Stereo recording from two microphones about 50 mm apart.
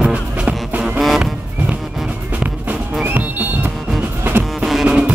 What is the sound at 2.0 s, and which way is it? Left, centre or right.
Music, right.